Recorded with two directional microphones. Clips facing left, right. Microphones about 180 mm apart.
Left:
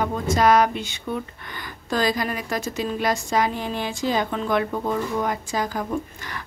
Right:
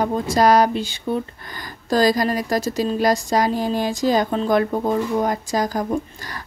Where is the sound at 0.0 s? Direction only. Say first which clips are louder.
Right 3 dB; 35° right (ahead or behind).